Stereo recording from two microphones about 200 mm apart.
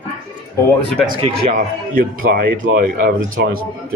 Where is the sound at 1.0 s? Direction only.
30° right (ahead or behind).